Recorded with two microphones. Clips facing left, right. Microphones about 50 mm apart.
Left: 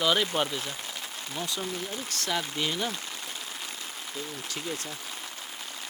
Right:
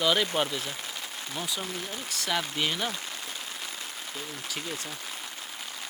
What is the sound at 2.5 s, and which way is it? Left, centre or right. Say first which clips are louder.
Speech: right 1 dB; right.